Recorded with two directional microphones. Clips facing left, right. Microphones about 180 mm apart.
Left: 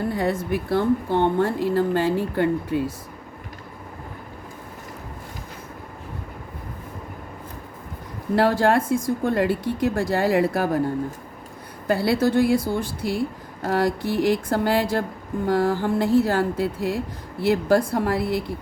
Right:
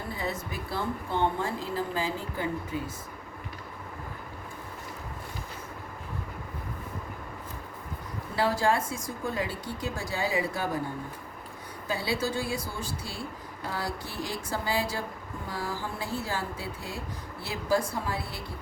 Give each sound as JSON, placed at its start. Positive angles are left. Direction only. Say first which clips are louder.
{"t": 0.1, "sound": "speech", "louder": "left 11 dB", "side_deg": 65}
{"t": 8.4, "sound": "speech", "louder": "left 7 dB", "side_deg": 65}
{"t": 11.9, "sound": "speech", "louder": "left 10 dB", "side_deg": 65}